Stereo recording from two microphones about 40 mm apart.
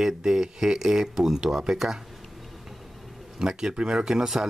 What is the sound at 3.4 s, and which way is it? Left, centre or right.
Speech, centre.